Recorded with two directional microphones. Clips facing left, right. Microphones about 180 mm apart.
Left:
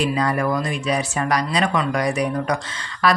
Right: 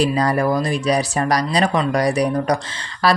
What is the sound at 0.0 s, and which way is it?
Speech, 35° right (ahead or behind).